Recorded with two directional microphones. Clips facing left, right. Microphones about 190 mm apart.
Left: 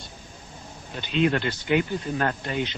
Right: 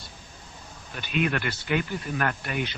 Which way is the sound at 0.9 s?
25° left (ahead or behind).